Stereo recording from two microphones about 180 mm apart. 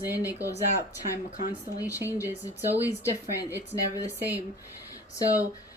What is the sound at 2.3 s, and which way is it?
Speech, 10° right (ahead or behind).